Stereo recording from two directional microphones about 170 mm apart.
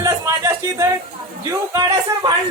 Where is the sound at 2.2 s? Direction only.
25° right (ahead or behind).